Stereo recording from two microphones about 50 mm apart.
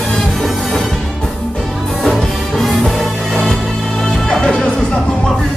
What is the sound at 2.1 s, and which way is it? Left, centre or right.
Music, centre.